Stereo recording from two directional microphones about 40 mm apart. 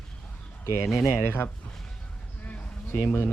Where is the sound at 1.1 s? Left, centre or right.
Left.